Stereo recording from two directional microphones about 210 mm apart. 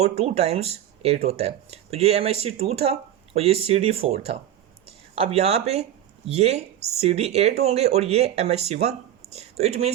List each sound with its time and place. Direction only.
0.0 s speech: 30° right (ahead or behind)